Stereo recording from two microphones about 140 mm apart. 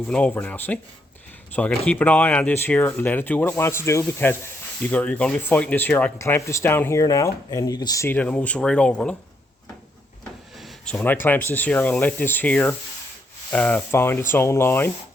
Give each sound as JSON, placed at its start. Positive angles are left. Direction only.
{"t": 0.1, "sound": "speech", "side_deg": 10}
{"t": 10.9, "sound": "speech", "side_deg": 15}